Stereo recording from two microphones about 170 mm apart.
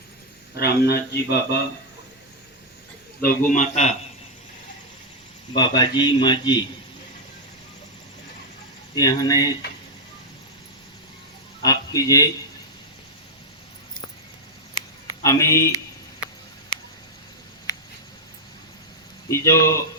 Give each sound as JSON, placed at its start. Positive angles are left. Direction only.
{"t": 0.5, "sound": "a man's voice", "side_deg": 70}
{"t": 3.2, "sound": "a man's voice", "side_deg": 50}
{"t": 5.5, "sound": "a man's voice", "side_deg": 25}
{"t": 9.0, "sound": "a man's voice", "side_deg": 20}
{"t": 11.6, "sound": "a man's voice", "side_deg": 20}
{"t": 15.2, "sound": "speech", "side_deg": 15}
{"t": 19.3, "sound": "speech", "side_deg": 15}